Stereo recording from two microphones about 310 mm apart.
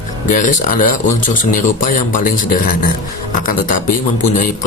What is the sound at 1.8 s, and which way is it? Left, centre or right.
Speech, left.